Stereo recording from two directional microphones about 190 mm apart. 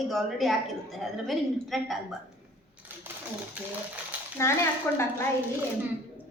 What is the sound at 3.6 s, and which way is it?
Speech, 5° right (ahead or behind).